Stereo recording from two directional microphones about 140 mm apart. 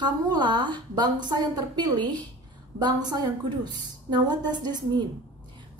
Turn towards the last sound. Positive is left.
turn(degrees=-30)  # may be behind; listen again after turning